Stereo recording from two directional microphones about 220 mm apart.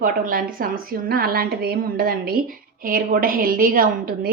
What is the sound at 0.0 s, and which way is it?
A woman's voice, 40° right (ahead or behind).